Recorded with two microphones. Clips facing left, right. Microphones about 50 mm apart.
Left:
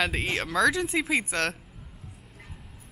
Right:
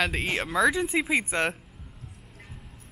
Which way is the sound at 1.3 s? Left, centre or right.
Centre.